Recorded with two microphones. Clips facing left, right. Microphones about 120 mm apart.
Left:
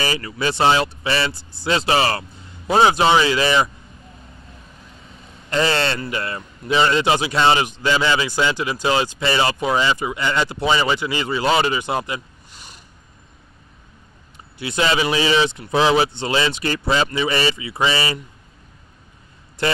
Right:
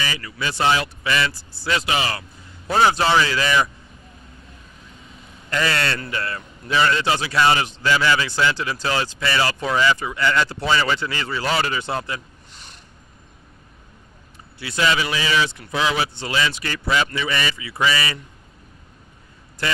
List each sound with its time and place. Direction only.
0.0 s a man's voice: 35° left (ahead or behind)
2.6 s a man's voice: 20° left (ahead or behind)
5.5 s a man's voice: 25° left (ahead or behind)
14.6 s a man's voice: 25° left (ahead or behind)
19.6 s speech: 25° left (ahead or behind)